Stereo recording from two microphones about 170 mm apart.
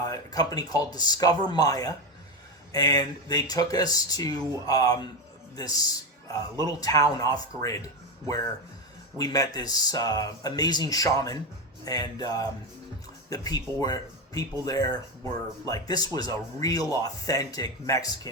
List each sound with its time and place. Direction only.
0.0 s speech: 20° left (ahead or behind)
9.1 s speech: 20° left (ahead or behind)